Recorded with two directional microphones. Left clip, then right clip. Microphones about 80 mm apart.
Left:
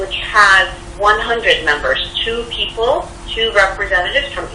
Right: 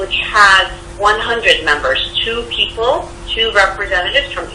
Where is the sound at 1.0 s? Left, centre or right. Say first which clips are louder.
Even; right.